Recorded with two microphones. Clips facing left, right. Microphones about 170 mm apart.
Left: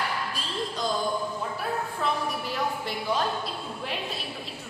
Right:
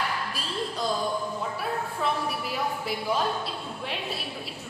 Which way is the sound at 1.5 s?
5° right (ahead or behind).